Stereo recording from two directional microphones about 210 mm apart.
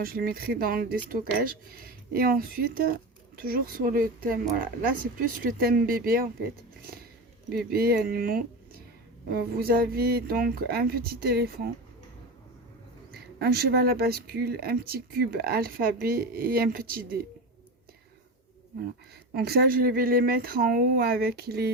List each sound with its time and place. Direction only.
0.0 s a woman's voice: 45° right (ahead or behind)
7.5 s speech: 45° right (ahead or behind)
13.1 s speech: 50° right (ahead or behind)
19.3 s speech: 50° right (ahead or behind)